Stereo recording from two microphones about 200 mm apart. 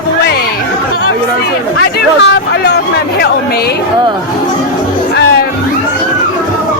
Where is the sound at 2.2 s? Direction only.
55° left (ahead or behind).